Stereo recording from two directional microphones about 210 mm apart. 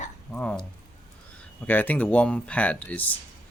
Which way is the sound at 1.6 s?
10° left (ahead or behind).